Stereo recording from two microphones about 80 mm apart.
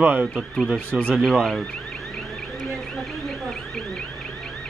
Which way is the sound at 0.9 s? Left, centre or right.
Centre.